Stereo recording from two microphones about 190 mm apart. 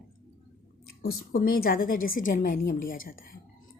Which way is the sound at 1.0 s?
50° left (ahead or behind).